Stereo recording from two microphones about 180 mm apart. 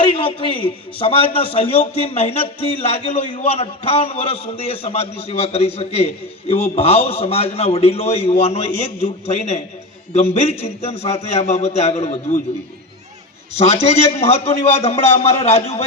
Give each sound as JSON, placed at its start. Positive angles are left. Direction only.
{"t": 0.0, "sound": "a man's voice", "side_deg": 30}
{"t": 14.2, "sound": "a man's voice", "side_deg": 35}